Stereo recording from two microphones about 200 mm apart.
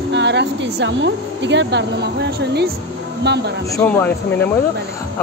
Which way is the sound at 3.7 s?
10° left (ahead or behind).